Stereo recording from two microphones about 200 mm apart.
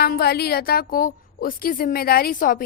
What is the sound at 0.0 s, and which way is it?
A woman's voice, 50° left (ahead or behind).